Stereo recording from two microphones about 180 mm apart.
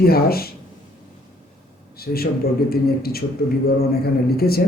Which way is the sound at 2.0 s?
60° left (ahead or behind).